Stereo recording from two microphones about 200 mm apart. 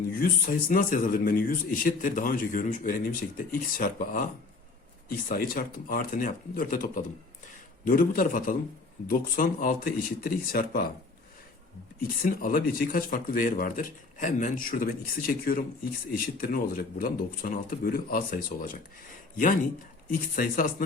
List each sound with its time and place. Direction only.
0.1 s speech: 45° left (ahead or behind)
11.9 s speech: 45° left (ahead or behind)
20.3 s speech: 45° left (ahead or behind)